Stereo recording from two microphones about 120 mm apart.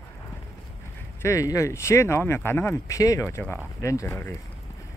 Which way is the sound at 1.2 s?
25° left (ahead or behind).